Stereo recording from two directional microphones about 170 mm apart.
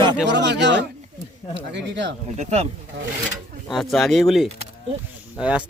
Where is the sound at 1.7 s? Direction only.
90° right.